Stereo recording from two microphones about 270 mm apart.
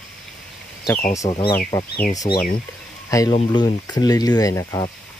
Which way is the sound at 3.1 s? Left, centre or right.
Centre.